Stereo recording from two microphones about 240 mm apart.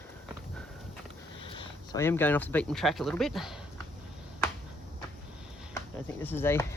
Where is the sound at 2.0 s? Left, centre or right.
Centre.